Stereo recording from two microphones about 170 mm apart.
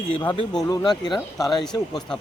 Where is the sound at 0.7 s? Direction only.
20° left (ahead or behind).